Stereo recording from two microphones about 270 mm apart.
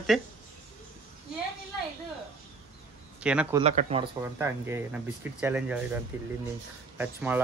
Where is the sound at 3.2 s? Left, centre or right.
Centre.